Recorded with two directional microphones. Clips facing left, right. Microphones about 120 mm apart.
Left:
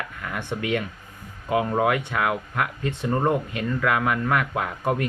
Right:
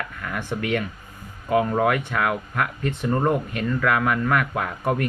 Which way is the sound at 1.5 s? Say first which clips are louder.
Right 2 dB; 15° left (ahead or behind).